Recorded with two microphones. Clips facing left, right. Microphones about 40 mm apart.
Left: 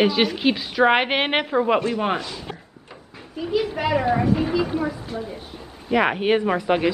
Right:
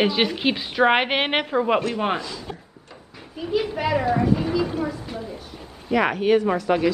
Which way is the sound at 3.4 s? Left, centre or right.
Centre.